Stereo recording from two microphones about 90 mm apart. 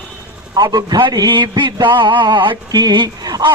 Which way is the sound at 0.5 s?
45° right (ahead or behind).